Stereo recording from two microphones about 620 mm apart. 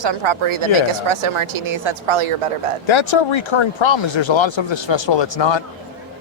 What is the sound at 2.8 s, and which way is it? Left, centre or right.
Speech, left.